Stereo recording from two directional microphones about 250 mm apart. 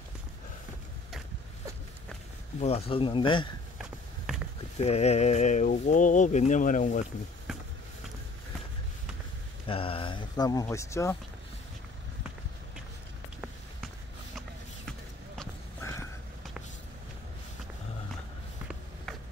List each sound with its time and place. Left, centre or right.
2.6 s speech: left
4.7 s speech: left
9.7 s speech: left
14.9 s basketball bounce: centre